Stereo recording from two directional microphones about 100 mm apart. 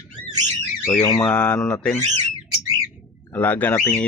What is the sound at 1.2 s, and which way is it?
Speech, 10° left (ahead or behind).